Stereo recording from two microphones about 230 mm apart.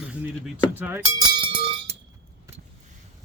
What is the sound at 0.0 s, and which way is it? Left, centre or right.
Speech, centre.